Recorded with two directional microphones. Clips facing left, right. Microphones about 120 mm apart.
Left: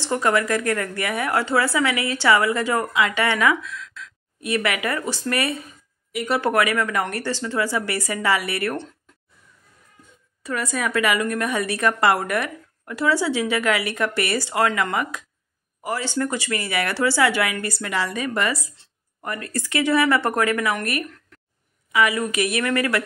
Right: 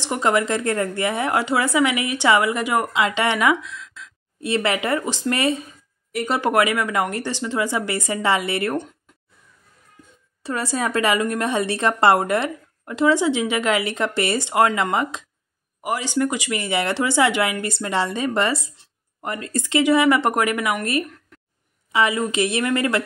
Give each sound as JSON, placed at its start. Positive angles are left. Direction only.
{"t": 0.0, "sound": "a woman's voice", "side_deg": -20}
{"t": 10.4, "sound": "a woman's voice", "side_deg": -30}